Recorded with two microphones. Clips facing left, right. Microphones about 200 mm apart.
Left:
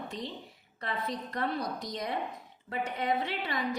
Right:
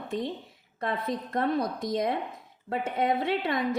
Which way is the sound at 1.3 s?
50° right (ahead or behind).